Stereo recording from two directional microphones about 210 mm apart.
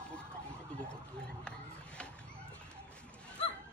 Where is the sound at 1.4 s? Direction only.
5° left (ahead or behind).